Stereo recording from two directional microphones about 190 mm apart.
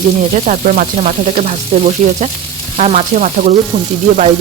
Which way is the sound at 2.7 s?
35° right (ahead or behind).